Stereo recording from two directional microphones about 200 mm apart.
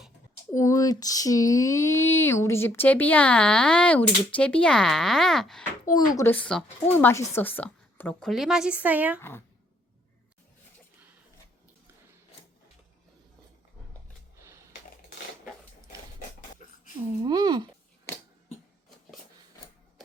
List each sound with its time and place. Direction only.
0.5 s a woman's voice: 15° left (ahead or behind); by 9.2 s 10° right (ahead or behind)
17.2 s speech: 20° right (ahead or behind)